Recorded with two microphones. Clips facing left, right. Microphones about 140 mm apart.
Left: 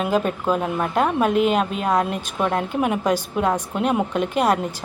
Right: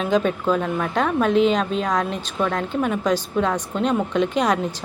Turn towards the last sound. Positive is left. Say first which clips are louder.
# even
turn(degrees=10)  # may be behind; listen again after turning